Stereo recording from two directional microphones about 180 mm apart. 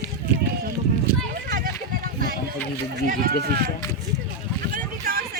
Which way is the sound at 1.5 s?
55° right (ahead or behind).